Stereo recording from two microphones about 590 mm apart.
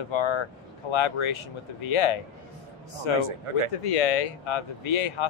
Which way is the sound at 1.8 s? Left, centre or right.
Left.